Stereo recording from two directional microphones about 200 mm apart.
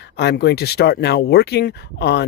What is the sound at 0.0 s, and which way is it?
Speech, 55° left (ahead or behind).